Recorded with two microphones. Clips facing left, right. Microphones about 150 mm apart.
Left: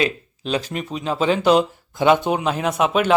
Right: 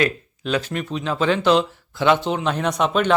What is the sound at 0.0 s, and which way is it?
Speech, 30° left (ahead or behind).